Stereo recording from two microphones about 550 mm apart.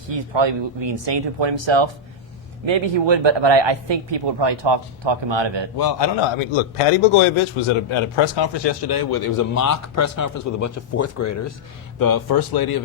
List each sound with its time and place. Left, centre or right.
0.1 s speech: right
5.7 s a man's voice: left